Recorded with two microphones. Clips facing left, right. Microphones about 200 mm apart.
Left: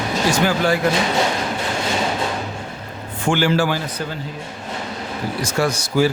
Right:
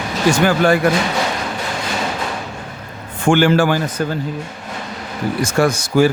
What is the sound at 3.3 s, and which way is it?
Speech, 55° right (ahead or behind).